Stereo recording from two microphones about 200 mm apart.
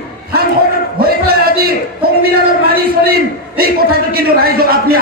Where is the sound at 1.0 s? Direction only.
50° right (ahead or behind).